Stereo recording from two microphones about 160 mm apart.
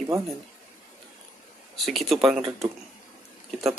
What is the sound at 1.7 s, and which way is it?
Speech, centre (ahead or behind).